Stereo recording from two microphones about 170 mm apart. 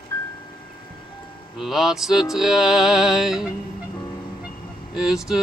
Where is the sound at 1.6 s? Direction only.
Centre (ahead or behind).